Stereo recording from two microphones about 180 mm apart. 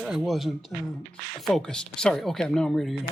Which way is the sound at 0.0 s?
5° right (ahead or behind).